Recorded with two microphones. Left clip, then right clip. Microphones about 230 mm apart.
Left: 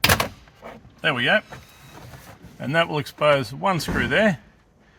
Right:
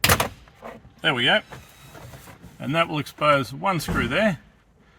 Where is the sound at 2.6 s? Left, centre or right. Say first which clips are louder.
Left 2 dB; left.